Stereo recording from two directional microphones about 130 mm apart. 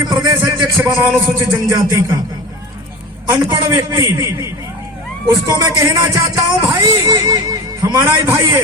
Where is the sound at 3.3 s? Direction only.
30° right (ahead or behind).